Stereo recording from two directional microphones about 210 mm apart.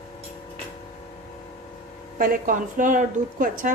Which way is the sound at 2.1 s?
40° right (ahead or behind).